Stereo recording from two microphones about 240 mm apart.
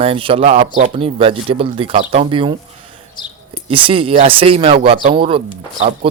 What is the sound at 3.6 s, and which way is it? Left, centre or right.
Speech, right.